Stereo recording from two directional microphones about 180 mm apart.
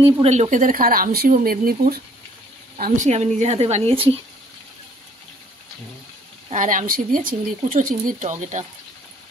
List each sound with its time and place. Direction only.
0.0 s speech: 35° right (ahead or behind); by 2.0 s 55° right (ahead or behind)
2.8 s a woman's voice: 40° right (ahead or behind)
6.5 s speech: 45° right (ahead or behind)